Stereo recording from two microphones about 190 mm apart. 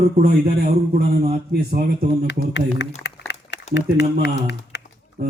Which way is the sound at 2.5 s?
65° left (ahead or behind).